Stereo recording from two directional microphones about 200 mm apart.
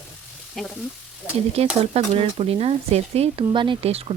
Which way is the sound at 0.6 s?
Centre (ahead or behind).